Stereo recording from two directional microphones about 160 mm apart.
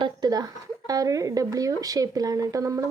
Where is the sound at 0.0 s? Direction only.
25° right (ahead or behind).